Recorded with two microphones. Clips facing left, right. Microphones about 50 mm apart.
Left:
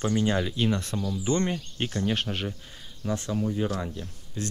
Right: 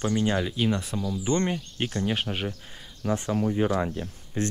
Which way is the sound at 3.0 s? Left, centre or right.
Right.